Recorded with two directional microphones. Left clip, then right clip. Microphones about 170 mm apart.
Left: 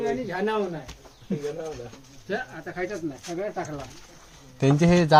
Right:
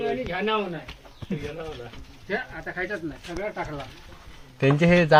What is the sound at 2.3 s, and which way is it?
Speech, 35° left (ahead or behind).